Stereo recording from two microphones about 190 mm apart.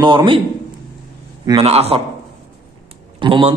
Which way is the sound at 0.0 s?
25° right (ahead or behind).